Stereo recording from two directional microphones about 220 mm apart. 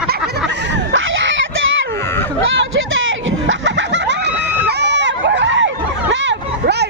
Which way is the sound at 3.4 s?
55° right (ahead or behind).